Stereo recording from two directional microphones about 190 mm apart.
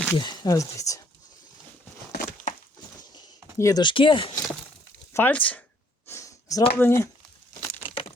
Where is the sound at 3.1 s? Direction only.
20° left (ahead or behind).